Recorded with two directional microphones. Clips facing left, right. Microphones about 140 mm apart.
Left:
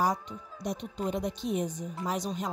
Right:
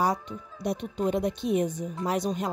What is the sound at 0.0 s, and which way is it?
A woman's voice, 65° right (ahead or behind).